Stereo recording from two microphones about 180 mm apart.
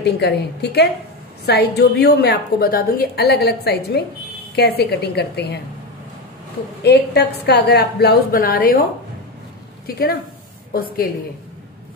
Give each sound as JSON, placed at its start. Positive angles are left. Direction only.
{"t": 0.0, "sound": "a woman's voice", "side_deg": 65}
{"t": 6.8, "sound": "a woman's voice", "side_deg": 65}
{"t": 9.8, "sound": "a woman's voice", "side_deg": 55}